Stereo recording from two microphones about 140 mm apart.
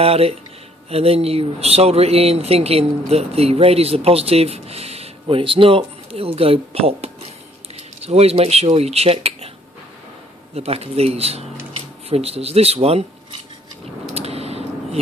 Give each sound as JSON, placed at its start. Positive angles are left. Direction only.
{"t": 0.0, "sound": "speech", "side_deg": -45}
{"t": 10.5, "sound": "speech", "side_deg": -45}
{"t": 14.1, "sound": "a sound", "side_deg": -45}